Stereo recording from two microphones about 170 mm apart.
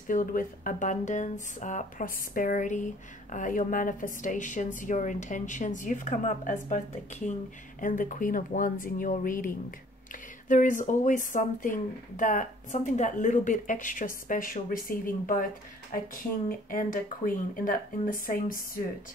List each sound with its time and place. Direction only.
0.1 s speech: 50° left (ahead or behind)
10.5 s speech: 50° left (ahead or behind)
16.4 s speech: 55° left (ahead or behind)